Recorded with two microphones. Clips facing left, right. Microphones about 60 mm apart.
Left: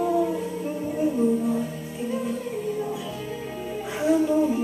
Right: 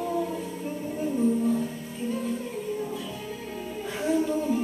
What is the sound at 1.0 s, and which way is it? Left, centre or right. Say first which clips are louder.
Music: left 2 dB; centre.